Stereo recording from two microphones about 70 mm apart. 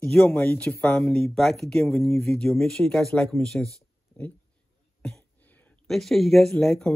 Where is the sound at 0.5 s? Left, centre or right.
Left.